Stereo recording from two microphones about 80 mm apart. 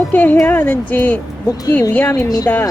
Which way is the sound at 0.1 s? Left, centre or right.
Left.